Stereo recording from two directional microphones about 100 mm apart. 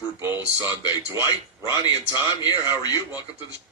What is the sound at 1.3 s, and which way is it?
A man's voice, 45° left (ahead or behind).